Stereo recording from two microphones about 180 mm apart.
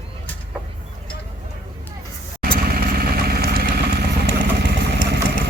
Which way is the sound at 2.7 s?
55° right (ahead or behind).